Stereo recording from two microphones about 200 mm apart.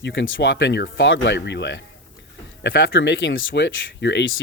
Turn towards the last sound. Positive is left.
turn(degrees=70)  # may be behind; listen again after turning